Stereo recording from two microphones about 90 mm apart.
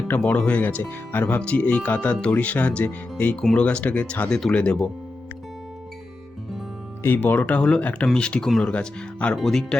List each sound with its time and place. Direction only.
0.1 s speech: 15° left (ahead or behind)
7.0 s speech: 25° left (ahead or behind); by 9.7 s 5° left (ahead or behind)